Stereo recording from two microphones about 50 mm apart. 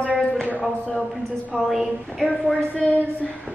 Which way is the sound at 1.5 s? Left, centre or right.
Centre.